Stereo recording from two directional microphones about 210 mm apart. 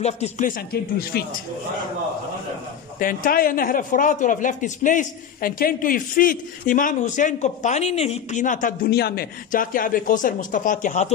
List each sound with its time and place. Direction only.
0.0 s speech: 30° left (ahead or behind)
0.6 s speech: 45° left (ahead or behind)
3.0 s speech: 40° left (ahead or behind)